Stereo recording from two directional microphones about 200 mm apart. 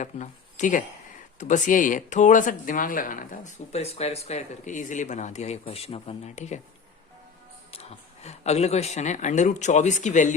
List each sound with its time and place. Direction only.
0.0 s speech: 40° left (ahead or behind)
7.7 s speech: 30° left (ahead or behind)